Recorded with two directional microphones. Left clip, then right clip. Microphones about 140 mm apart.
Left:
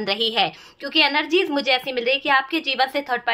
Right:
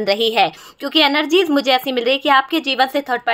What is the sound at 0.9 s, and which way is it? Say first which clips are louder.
A woman's voice: right 4 dB; 60° right (ahead or behind).